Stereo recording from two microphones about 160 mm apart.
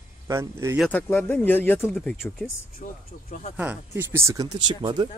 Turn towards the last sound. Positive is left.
turn(degrees=-25)  # may be behind; listen again after turning